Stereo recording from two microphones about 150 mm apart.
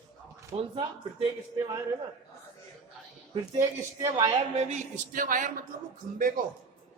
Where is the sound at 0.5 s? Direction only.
30° right (ahead or behind).